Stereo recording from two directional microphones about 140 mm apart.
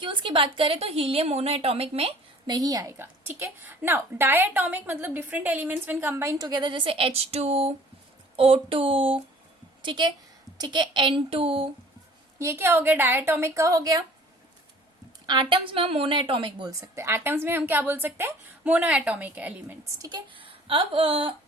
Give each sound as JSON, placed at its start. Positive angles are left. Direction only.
{"t": 0.0, "sound": "a woman's voice", "side_deg": -35}
{"t": 2.5, "sound": "a woman's voice", "side_deg": -25}
{"t": 12.4, "sound": "a woman's voice", "side_deg": -20}
{"t": 15.3, "sound": "a woman's voice", "side_deg": -35}
{"t": 16.8, "sound": "a woman's voice", "side_deg": -20}
{"t": 20.0, "sound": "speech", "side_deg": -30}